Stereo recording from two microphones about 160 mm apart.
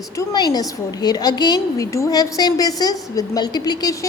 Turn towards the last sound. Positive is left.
turn(degrees=25)  # may be behind; listen again after turning